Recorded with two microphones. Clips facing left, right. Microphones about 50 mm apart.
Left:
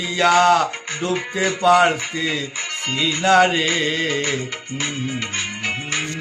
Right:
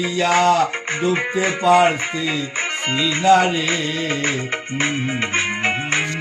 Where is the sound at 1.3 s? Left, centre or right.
Right.